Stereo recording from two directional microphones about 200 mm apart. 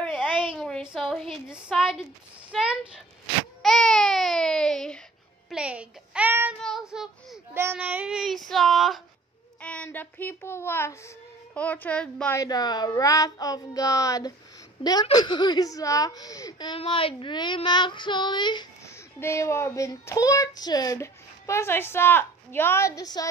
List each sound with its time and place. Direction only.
0.0 s a sound: 5° left (ahead or behind)
0.5 s a woman's voice: 5° left (ahead or behind)
12.4 s a woman's voice: 20° left (ahead or behind)